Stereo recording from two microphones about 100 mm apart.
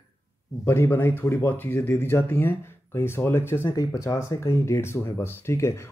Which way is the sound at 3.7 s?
35° left (ahead or behind).